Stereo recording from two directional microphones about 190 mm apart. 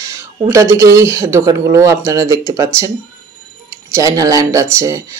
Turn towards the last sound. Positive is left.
turn(degrees=-15)  # may be behind; listen again after turning